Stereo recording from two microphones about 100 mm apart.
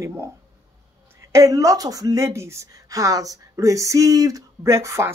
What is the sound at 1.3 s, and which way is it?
Speech, 35° right (ahead or behind).